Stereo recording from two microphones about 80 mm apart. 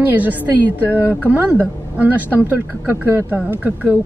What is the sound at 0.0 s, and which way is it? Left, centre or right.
Speech, right.